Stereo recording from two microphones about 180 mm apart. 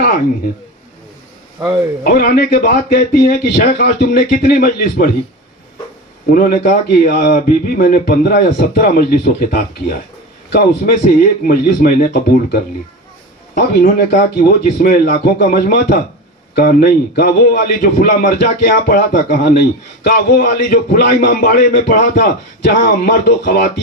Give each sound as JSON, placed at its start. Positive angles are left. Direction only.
{"t": 2.0, "sound": "speech", "side_deg": 55}
{"t": 6.2, "sound": "speech", "side_deg": 55}
{"t": 11.2, "sound": "speech", "side_deg": 55}
{"t": 13.6, "sound": "speech", "side_deg": 55}